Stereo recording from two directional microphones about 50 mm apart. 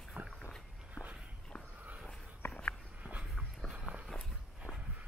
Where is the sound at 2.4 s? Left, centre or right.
Left.